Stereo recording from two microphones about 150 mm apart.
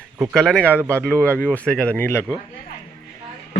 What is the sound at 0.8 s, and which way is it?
Speech, 15° right (ahead or behind).